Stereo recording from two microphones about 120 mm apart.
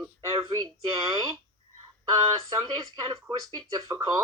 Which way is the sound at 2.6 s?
35° right (ahead or behind).